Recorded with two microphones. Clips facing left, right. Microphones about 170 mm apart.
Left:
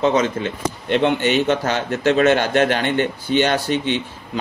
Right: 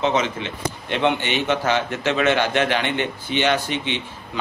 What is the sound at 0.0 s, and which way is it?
A man's voice, 40° left (ahead or behind).